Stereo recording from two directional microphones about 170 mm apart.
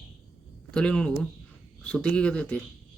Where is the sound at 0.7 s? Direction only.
5° left (ahead or behind).